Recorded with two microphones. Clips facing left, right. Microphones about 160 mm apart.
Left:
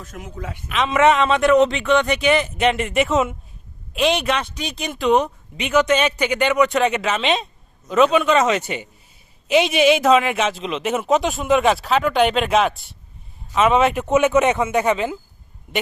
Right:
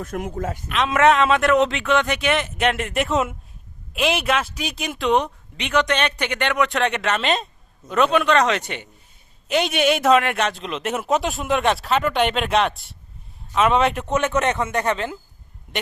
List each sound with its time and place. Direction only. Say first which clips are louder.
0.0 s speech: right 7 dB; 55° right (ahead or behind)
0.7 s speech: left 1 dB; centre (ahead or behind)